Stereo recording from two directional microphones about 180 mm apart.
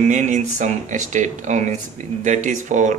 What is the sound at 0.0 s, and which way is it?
Speech, 40° right (ahead or behind).